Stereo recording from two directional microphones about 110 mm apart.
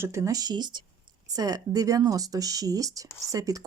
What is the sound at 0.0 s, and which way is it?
Speech, 25° right (ahead or behind).